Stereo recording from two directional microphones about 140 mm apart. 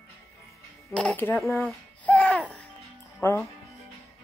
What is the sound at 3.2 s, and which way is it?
Speech, 15° left (ahead or behind).